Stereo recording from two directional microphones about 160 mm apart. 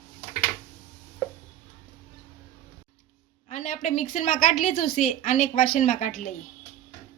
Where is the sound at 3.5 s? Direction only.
50° left (ahead or behind).